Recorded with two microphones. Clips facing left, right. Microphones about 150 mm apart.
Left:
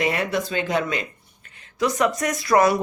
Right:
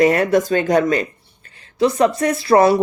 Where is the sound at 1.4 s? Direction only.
30° right (ahead or behind).